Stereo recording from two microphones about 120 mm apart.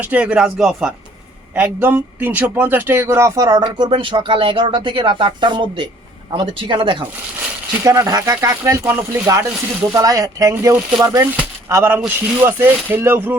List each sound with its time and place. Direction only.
0.0 s speech: 10° right (ahead or behind)
1.5 s speech: 20° right (ahead or behind); by 7.0 s 45° right (ahead or behind)
7.9 s speech: 30° right (ahead or behind)